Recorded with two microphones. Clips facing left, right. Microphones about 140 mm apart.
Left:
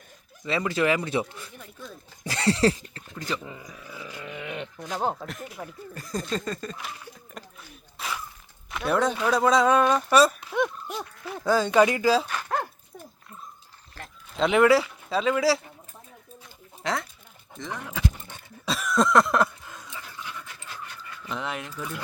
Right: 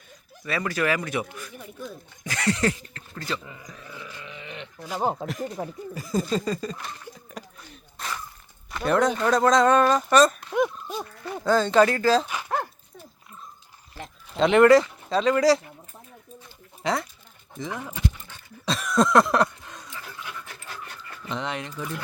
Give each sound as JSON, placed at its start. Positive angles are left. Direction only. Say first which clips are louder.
{"t": 0.4, "sound": "speech", "louder": "left 1 dB", "side_deg": 20}
{"t": 1.5, "sound": "speech", "louder": "right 7 dB", "side_deg": -5}
{"t": 2.2, "sound": "speech", "louder": "left 2 dB", "side_deg": 30}
{"t": 3.2, "sound": "speech", "louder": "even", "side_deg": 15}
{"t": 3.7, "sound": "speech", "louder": "left 1 dB", "side_deg": 10}
{"t": 4.2, "sound": "dog", "louder": "left 9 dB", "side_deg": 55}
{"t": 4.8, "sound": "speech", "louder": "right 3 dB", "side_deg": -5}
{"t": 12.3, "sound": "dog", "louder": "right 1 dB", "side_deg": -5}
{"t": 14.3, "sound": "speech", "louder": "right 4 dB", "side_deg": 0}
{"t": 16.8, "sound": "speech", "louder": "right 3 dB", "side_deg": 0}
{"t": 18.6, "sound": "a sound", "louder": "right 2 dB", "side_deg": 5}
{"t": 21.2, "sound": "speech", "louder": "right 2 dB", "side_deg": 5}